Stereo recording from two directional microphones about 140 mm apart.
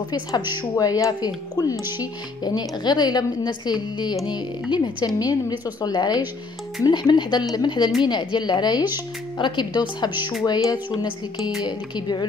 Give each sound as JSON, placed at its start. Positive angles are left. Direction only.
{"t": 0.1, "sound": "a woman's voice", "side_deg": 25}